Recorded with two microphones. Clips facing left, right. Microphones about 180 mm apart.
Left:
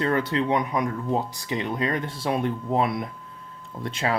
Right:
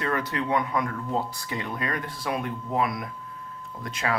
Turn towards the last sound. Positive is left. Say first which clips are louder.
# left 3 dB
turn(degrees=30)  # may be behind; listen again after turning